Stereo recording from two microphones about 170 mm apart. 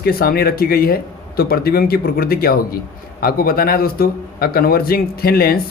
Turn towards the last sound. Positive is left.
turn(degrees=65)  # may be behind; listen again after turning